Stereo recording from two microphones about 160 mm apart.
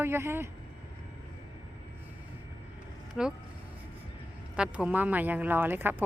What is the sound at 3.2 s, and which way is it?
Speech, 5° right (ahead or behind).